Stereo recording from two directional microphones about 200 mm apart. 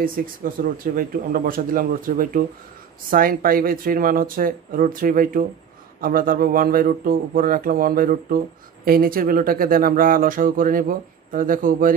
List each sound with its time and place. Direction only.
0.0 s speech: 45° right (ahead or behind)